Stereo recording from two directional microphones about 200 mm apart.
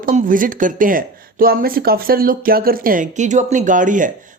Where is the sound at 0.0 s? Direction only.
40° right (ahead or behind).